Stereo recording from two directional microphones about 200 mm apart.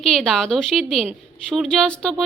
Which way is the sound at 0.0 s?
5° left (ahead or behind).